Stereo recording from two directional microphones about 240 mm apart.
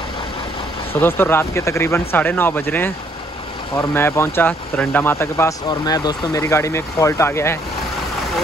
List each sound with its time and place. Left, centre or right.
1.0 s speech: centre